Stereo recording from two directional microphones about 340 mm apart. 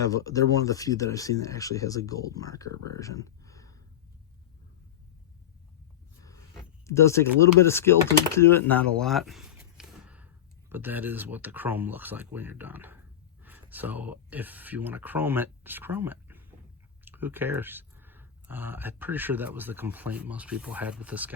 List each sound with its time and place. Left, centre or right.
0.0 s speech: centre
6.8 s speech: centre